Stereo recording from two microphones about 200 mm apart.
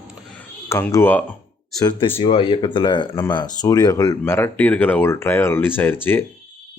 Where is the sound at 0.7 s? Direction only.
15° left (ahead or behind).